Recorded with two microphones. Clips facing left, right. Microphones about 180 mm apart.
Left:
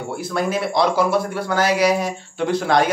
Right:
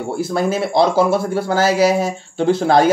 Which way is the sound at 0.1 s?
30° right (ahead or behind).